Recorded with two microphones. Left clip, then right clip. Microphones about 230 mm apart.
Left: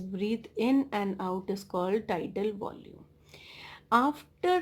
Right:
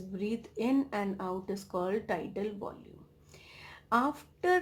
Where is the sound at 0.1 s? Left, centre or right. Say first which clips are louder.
Left 4 dB; left.